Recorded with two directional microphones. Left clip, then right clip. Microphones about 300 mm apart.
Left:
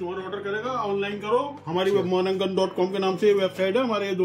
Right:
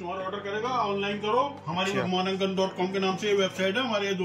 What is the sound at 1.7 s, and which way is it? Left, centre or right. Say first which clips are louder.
A man's voice: left 6 dB; centre.